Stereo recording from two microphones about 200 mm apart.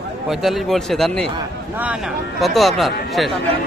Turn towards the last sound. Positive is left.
turn(degrees=0)  # may be behind; listen again after turning